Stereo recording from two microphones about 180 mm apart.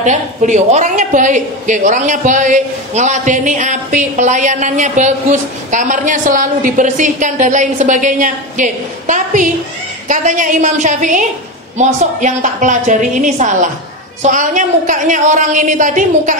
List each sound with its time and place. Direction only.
0.0 s a woman's voice: 45° right (ahead or behind)